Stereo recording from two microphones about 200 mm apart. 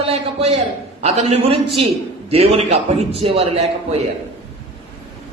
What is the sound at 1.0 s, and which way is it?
A man's voice, 30° right (ahead or behind).